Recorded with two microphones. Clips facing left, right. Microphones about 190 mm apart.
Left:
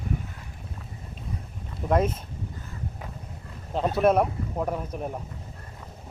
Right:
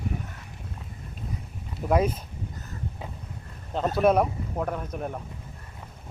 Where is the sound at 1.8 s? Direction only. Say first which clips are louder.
Even; 5° right (ahead or behind).